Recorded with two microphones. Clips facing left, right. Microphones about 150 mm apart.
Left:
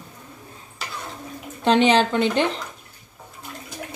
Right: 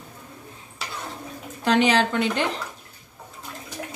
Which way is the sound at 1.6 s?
25° left (ahead or behind).